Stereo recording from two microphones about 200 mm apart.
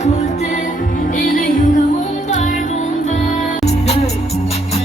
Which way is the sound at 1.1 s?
40° left (ahead or behind).